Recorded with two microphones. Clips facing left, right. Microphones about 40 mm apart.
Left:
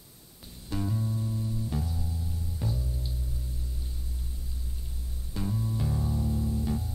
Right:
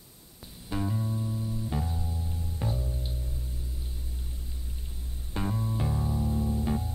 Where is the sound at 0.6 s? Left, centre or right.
Centre.